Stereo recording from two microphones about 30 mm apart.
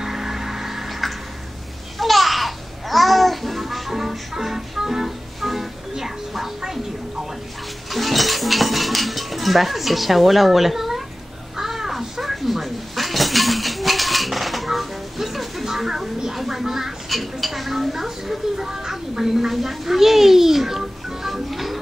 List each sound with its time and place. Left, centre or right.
0.0 s music: centre
2.0 s babbling: centre
7.9 s dishes: centre
11.5 s crow: centre
16.3 s a sound: centre
17.1 s dishes: centre
19.5 s music: centre